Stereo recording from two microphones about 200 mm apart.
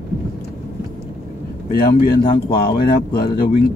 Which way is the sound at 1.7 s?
50° left (ahead or behind).